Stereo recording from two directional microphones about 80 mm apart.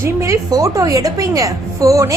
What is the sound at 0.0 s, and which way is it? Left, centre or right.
A woman's voice, right.